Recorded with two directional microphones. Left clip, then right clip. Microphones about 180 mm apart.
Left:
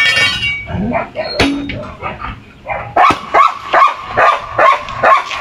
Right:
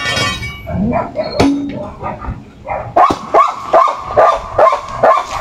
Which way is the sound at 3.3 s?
20° right (ahead or behind).